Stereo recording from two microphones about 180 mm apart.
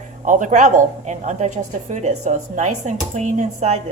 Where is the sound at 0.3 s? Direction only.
45° right (ahead or behind).